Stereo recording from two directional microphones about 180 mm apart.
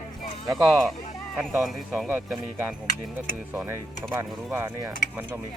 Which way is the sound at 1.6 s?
Centre (ahead or behind).